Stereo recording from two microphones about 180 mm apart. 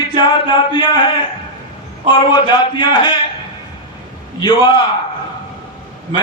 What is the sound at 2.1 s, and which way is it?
A man's voice, 25° left (ahead or behind).